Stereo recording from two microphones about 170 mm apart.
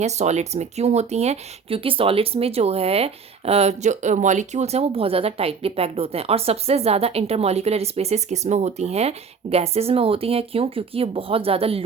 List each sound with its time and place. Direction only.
0.0 s speech: 40° right (ahead or behind)